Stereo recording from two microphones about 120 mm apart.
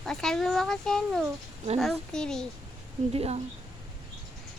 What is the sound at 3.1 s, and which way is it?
Speech, 55° right (ahead or behind).